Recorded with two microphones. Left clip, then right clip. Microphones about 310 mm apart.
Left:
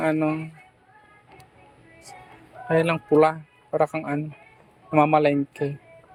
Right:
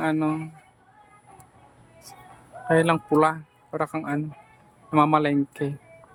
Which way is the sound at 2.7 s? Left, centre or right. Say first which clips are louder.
Even; centre.